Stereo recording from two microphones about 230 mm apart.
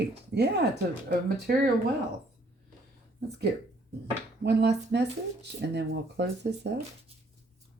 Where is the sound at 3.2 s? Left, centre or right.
Right.